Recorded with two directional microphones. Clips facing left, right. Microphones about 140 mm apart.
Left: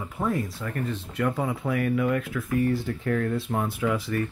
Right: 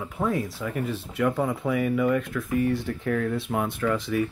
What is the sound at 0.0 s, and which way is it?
Speech, centre (ahead or behind).